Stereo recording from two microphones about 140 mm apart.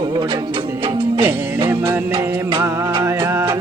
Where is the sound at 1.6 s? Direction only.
15° right (ahead or behind).